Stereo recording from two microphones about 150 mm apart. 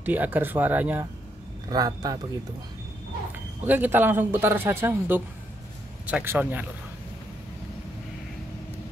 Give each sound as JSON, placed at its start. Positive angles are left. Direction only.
{"t": 0.0, "sound": "a man's voice", "side_deg": -10}
{"t": 1.7, "sound": "a man's voice", "side_deg": -25}
{"t": 3.6, "sound": "a man's voice", "side_deg": -10}